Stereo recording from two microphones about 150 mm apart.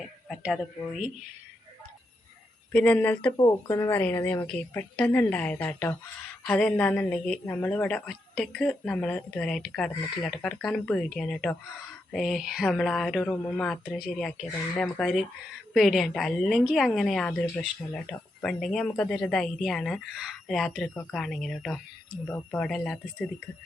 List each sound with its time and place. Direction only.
0.0 s speech: centre (ahead or behind)
2.7 s a woman's voice: 10° left (ahead or behind)
3.3 s a woman's voice: 25° left (ahead or behind); by 23.0 s 5° left (ahead or behind)